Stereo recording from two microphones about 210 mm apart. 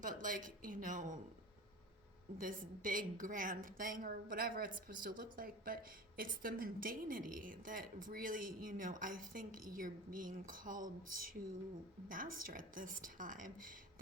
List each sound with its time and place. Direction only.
0.0 s a woman's voice: 40° right (ahead or behind)
2.4 s a woman's voice: 40° right (ahead or behind)